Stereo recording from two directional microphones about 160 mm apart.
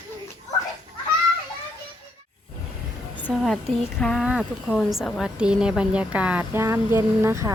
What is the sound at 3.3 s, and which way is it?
Speech, centre (ahead or behind).